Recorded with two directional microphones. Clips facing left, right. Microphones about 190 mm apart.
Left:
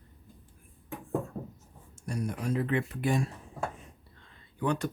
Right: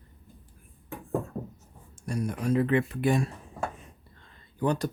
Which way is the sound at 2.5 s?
75° right (ahead or behind).